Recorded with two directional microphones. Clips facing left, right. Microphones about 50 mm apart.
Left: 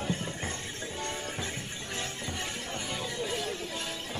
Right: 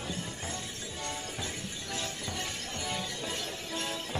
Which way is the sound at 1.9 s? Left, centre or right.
Left.